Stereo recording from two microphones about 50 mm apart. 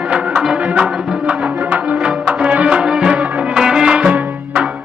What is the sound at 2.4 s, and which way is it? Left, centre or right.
Music, right.